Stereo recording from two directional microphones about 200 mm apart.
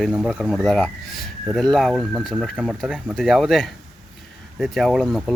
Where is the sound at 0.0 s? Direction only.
Centre (ahead or behind).